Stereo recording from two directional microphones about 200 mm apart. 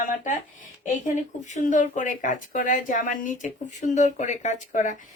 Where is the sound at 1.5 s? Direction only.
40° left (ahead or behind).